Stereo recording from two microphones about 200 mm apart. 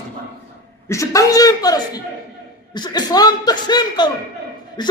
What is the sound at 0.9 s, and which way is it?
A man's voice, 15° left (ahead or behind).